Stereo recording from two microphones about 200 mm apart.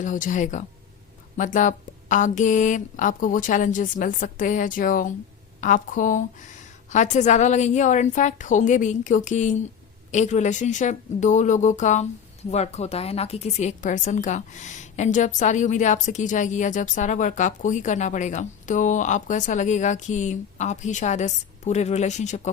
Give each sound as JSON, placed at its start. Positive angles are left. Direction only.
{"t": 0.0, "sound": "a woman's voice", "side_deg": 40}